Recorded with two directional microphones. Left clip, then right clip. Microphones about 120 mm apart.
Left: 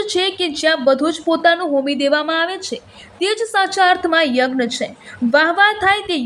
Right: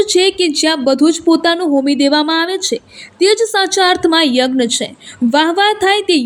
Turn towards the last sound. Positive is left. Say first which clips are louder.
# right 4 dB
turn(degrees=-30)  # may be behind; listen again after turning